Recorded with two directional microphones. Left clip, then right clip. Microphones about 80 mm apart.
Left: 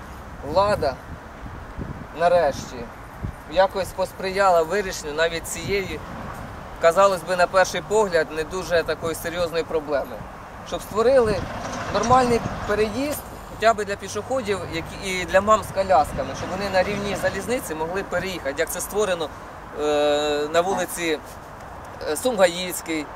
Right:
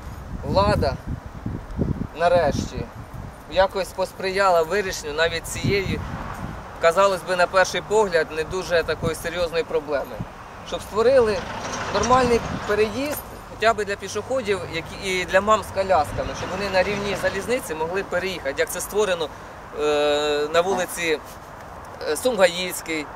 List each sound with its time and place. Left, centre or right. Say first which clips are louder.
0.5 s speech: even; centre
2.1 s speech: even; centre
11.3 s speech: right 1 dB; centre
12.4 s a sound: right 1 dB; centre
12.7 s speech: right 1 dB; centre